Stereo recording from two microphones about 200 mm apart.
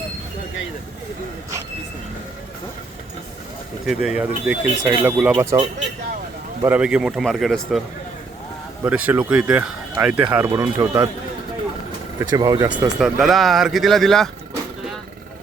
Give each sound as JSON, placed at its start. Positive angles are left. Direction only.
{"t": 3.8, "sound": "speech", "side_deg": -5}
{"t": 5.3, "sound": "speech", "side_deg": -15}
{"t": 8.8, "sound": "speech", "side_deg": -10}
{"t": 12.3, "sound": "speech", "side_deg": -20}
{"t": 13.0, "sound": "speech", "side_deg": 0}